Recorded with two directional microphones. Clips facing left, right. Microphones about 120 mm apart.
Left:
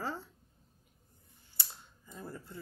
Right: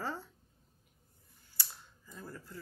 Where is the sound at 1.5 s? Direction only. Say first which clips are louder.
Right 1 dB; 25° left (ahead or behind).